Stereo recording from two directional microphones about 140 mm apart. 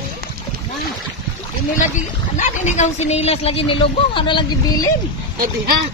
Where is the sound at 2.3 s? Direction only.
60° left (ahead or behind); by 4.5 s 35° left (ahead or behind).